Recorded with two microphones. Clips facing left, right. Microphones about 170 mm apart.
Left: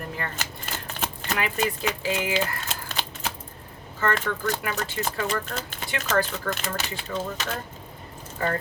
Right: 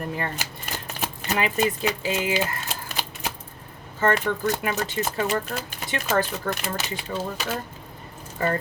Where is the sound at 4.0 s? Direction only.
15° right (ahead or behind).